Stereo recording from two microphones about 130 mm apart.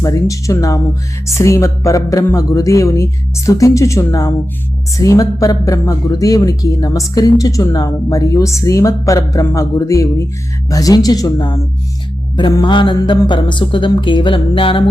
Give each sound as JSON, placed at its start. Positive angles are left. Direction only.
{"t": 0.0, "sound": "speech", "side_deg": 25}
{"t": 12.4, "sound": "mantra", "side_deg": 35}